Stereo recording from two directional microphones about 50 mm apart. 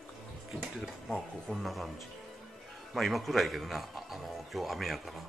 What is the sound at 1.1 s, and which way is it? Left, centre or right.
Speech, centre.